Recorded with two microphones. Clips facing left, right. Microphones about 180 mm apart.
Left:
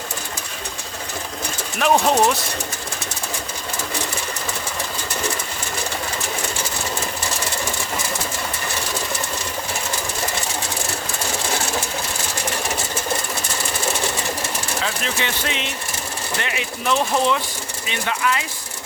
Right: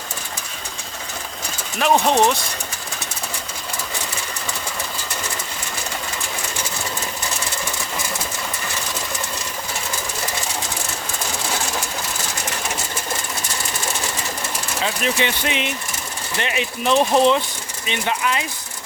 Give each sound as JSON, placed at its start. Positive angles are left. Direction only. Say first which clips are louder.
{"t": 1.8, "sound": "speech", "louder": "even", "side_deg": 5}
{"t": 15.0, "sound": "speech", "louder": "right 4 dB", "side_deg": -15}